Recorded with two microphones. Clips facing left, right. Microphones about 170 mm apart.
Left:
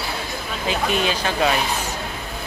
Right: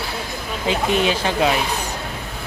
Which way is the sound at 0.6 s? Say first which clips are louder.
Right 3 dB; 20° right (ahead or behind).